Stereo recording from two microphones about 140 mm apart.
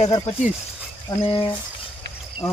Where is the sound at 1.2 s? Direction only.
40° left (ahead or behind).